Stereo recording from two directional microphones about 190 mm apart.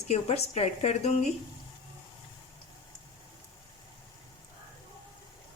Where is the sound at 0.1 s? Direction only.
35° left (ahead or behind).